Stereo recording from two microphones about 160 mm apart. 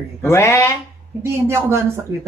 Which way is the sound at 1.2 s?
15° right (ahead or behind).